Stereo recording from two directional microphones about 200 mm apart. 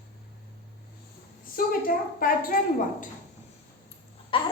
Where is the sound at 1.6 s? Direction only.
45° left (ahead or behind).